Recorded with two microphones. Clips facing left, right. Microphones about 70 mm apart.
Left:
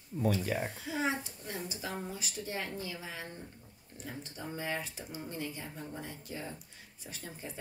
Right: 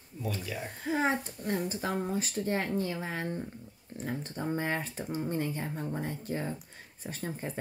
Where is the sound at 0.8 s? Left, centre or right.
Right.